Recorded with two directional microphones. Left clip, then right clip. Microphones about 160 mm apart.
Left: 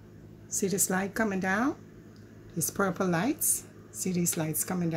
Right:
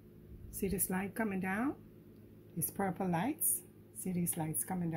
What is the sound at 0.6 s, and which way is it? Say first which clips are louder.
Speech: left 8 dB; 15° left (ahead or behind).